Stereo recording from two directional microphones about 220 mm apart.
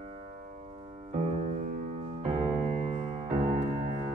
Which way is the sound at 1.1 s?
35° right (ahead or behind).